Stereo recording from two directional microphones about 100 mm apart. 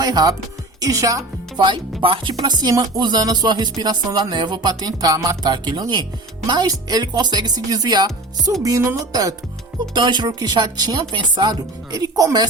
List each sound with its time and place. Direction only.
0.0 s speech: 40° right (ahead or behind)
1.6 s speech: 55° right (ahead or behind)
2.4 s speech: 40° right (ahead or behind)
9.9 s speech: 50° right (ahead or behind)